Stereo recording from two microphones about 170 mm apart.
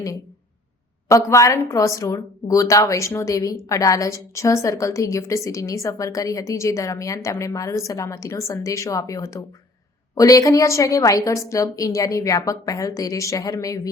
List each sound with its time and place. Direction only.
1.0 s speech: 20° left (ahead or behind)